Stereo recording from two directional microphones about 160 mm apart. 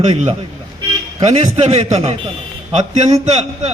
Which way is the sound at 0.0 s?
40° right (ahead or behind).